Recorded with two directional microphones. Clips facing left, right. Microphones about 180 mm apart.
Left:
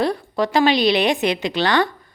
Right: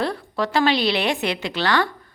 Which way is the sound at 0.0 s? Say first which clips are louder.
Left 4 dB; 15° left (ahead or behind).